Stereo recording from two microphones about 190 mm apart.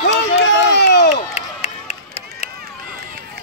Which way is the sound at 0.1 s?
65° left (ahead or behind).